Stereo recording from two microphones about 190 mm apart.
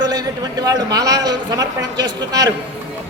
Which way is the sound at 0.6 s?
20° right (ahead or behind).